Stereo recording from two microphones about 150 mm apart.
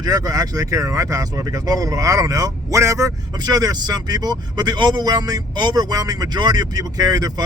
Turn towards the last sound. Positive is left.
turn(degrees=-25)  # may be behind; listen again after turning